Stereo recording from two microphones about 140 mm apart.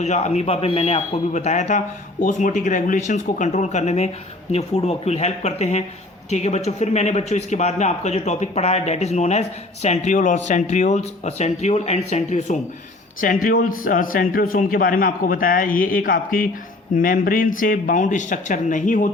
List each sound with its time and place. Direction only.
0.0 s speech: 55° left (ahead or behind)
2.2 s speech: 70° left (ahead or behind)
13.2 s a man's voice: 75° left (ahead or behind)